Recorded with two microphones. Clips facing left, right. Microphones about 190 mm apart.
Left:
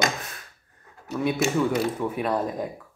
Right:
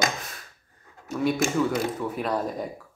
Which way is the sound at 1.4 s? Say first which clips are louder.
Left 1 dB; 45° right (ahead or behind).